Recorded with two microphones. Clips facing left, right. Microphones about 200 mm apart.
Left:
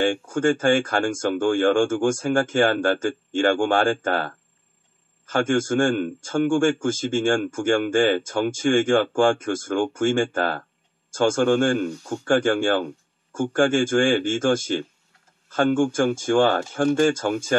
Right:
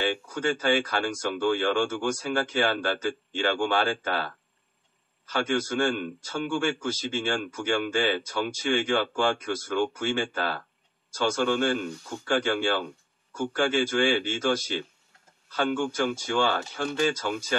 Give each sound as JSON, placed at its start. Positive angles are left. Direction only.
{"t": 0.0, "sound": "a man's voice", "side_deg": 50}